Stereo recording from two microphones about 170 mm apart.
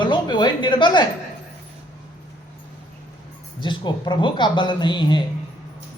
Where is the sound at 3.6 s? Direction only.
25° left (ahead or behind).